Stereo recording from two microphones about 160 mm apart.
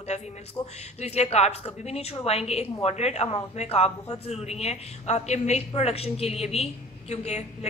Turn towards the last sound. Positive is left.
turn(degrees=45)  # may be behind; listen again after turning